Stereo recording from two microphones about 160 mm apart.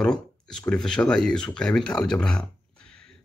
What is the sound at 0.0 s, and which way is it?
Speech, 5° left (ahead or behind).